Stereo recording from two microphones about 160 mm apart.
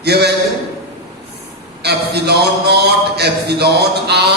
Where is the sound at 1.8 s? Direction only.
90° right.